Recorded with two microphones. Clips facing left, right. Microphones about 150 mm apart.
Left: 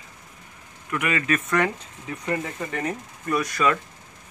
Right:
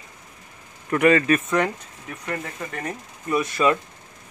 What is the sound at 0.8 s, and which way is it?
Speech, 35° right (ahead or behind).